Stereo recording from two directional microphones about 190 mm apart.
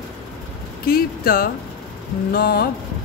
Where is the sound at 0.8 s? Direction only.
50° left (ahead or behind).